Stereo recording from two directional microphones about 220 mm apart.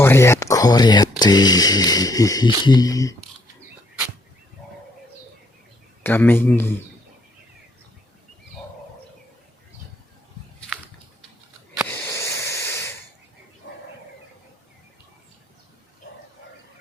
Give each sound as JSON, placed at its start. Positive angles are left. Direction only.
{"t": 0.0, "sound": "speech", "side_deg": 10}
{"t": 6.0, "sound": "speech", "side_deg": 10}
{"t": 12.1, "sound": "hiss", "side_deg": 15}
{"t": 13.6, "sound": "bird", "side_deg": 50}